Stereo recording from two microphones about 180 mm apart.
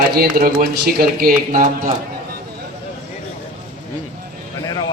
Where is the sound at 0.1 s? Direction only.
55° right (ahead or behind).